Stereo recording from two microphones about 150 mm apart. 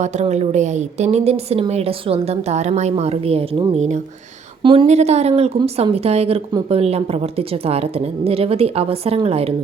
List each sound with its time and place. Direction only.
0.0 s a woman's voice: 50° right (ahead or behind)
3.8 s a woman's voice: 50° right (ahead or behind)
4.6 s a woman's voice: 35° right (ahead or behind)
4.9 s a woman's voice: 45° right (ahead or behind)